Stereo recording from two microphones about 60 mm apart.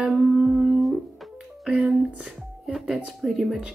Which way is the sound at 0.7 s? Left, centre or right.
Centre.